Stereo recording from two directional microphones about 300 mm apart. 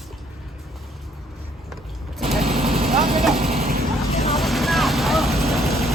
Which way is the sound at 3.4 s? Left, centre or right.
Right.